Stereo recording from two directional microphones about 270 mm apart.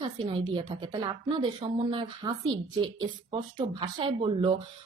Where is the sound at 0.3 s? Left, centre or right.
Centre.